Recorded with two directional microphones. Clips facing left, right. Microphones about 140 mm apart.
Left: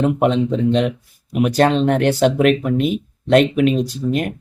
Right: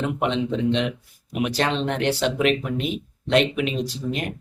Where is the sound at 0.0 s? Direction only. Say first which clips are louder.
Left 7 dB; 45° left (ahead or behind).